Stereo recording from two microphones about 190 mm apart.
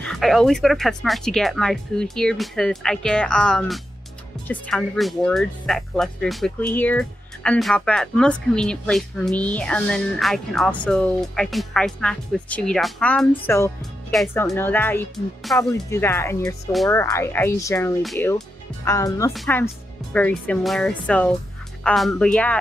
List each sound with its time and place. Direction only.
0.1 s speech: centre (ahead or behind)
14.3 s speech: 15° left (ahead or behind)